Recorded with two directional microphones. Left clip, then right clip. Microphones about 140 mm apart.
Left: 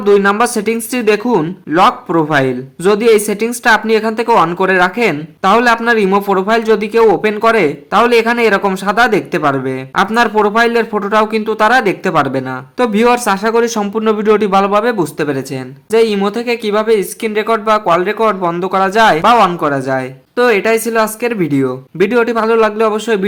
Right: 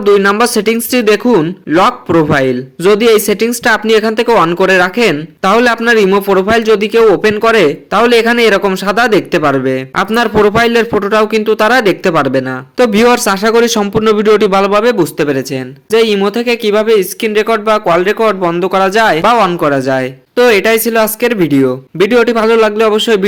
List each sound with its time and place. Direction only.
0.0 s speech: 20° right (ahead or behind)